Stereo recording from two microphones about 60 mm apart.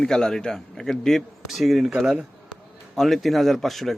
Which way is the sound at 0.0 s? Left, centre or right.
Centre.